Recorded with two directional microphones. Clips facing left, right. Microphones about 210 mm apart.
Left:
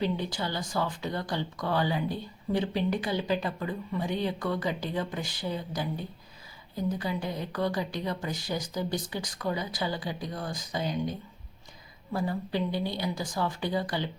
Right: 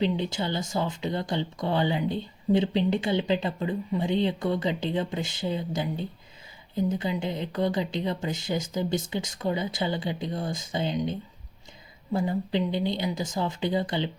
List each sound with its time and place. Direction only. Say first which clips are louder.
0.0 s speech: right 3 dB; 25° right (ahead or behind)